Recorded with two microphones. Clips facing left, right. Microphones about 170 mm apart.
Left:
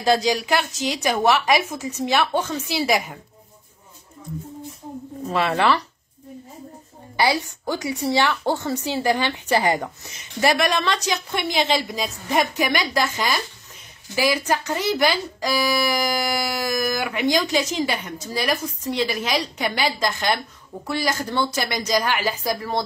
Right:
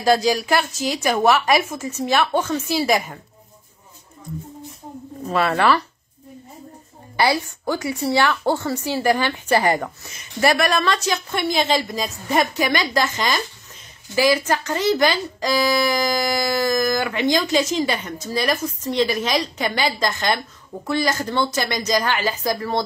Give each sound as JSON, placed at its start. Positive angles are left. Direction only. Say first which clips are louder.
{"t": 0.8, "sound": "speech", "louder": "right 2 dB", "side_deg": 20}
{"t": 5.4, "sound": "speech", "louder": "right 2 dB", "side_deg": 20}
{"t": 7.2, "sound": "speech", "louder": "right 1 dB", "side_deg": 15}